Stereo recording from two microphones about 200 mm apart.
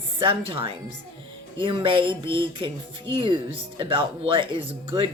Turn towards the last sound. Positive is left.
turn(degrees=-25)  # may be behind; listen again after turning